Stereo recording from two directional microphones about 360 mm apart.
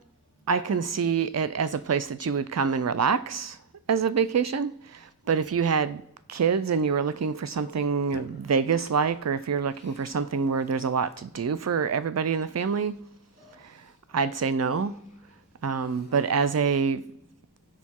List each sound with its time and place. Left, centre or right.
0.4 s speech: right
14.1 s speech: right